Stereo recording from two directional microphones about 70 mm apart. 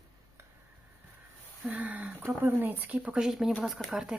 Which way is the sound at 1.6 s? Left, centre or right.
Right.